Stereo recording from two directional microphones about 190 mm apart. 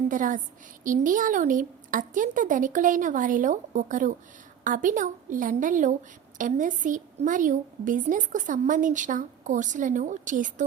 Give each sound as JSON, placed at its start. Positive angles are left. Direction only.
{"t": 0.1, "sound": "a woman's voice", "side_deg": -45}